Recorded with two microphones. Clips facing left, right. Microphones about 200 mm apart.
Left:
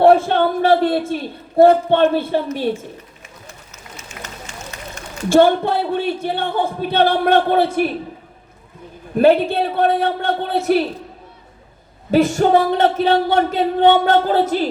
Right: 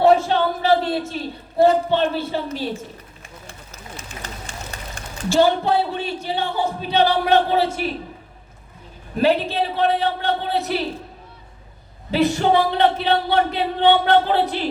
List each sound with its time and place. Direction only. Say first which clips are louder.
0.0 s speech: left 3 dB; 55° left (ahead or behind)
3.9 s run: even; 30° right (ahead or behind)
5.3 s speech: left 4 dB; 55° left (ahead or behind)
9.1 s speech: left 5 dB; 50° left (ahead or behind)
12.1 s speech: left 4 dB; 45° left (ahead or behind)